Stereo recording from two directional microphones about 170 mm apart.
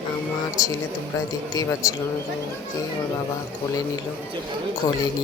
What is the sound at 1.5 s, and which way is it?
Speech, 20° left (ahead or behind).